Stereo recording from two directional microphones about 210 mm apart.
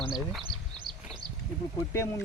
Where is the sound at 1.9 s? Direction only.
10° left (ahead or behind).